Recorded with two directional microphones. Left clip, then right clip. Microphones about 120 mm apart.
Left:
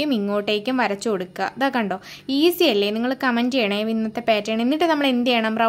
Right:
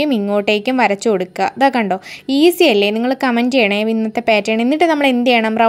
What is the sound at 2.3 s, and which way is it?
A woman's voice, 40° right (ahead or behind).